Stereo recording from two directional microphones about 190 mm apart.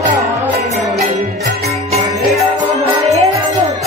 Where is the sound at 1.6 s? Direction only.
35° right (ahead or behind).